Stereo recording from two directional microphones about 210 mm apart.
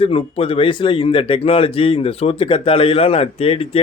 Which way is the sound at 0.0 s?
25° left (ahead or behind).